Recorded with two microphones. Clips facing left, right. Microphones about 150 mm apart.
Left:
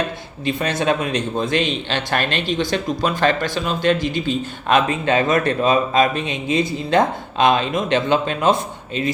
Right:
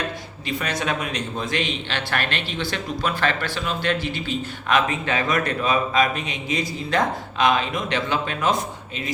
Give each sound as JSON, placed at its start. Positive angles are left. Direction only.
{"t": 0.6, "sound": "a man's voice", "side_deg": 25}